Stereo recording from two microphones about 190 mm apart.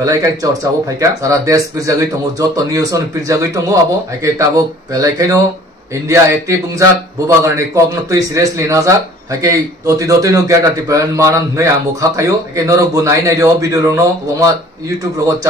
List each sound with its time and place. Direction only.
0.0 s a man's voice: 20° right (ahead or behind)